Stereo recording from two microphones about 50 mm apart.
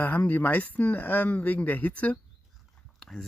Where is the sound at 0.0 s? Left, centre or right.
Left.